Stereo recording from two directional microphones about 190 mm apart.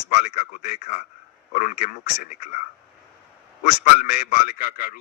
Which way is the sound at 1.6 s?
40° left (ahead or behind).